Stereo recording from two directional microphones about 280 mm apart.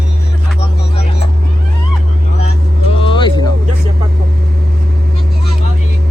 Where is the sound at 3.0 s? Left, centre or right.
Centre.